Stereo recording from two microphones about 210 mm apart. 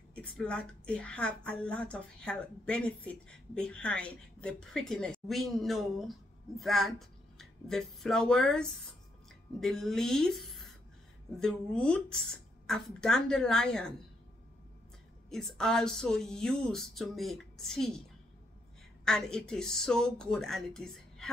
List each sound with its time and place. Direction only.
0.1 s a woman's voice: 5° left (ahead or behind)
15.2 s a woman's voice: centre (ahead or behind)
19.0 s a woman's voice: 5° left (ahead or behind)